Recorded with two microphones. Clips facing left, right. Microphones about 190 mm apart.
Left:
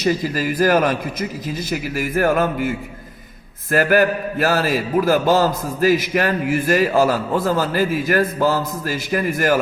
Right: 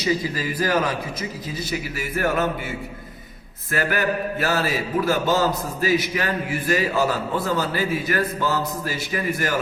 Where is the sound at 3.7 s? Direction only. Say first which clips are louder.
Left 7 dB; 45° left (ahead or behind).